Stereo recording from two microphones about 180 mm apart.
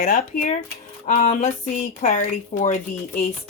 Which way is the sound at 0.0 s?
50° left (ahead or behind).